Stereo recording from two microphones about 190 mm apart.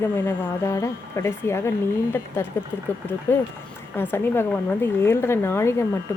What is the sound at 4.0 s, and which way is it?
Speech, 10° left (ahead or behind).